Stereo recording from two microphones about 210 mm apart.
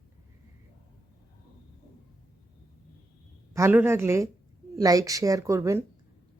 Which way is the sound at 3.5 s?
10° right (ahead or behind).